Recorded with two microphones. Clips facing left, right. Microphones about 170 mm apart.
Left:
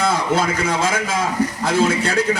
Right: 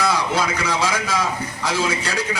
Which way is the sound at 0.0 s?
50° left (ahead or behind).